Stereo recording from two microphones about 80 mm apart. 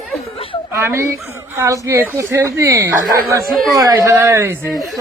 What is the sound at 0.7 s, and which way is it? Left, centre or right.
Speech, right.